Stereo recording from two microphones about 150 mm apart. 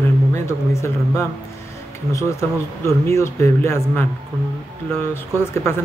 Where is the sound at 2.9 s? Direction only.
15° left (ahead or behind).